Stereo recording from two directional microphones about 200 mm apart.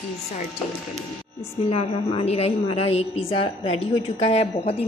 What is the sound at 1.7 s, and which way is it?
A woman's voice, 30° left (ahead or behind).